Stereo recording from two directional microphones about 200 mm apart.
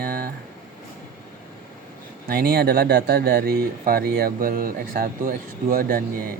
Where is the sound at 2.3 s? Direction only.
50° right (ahead or behind).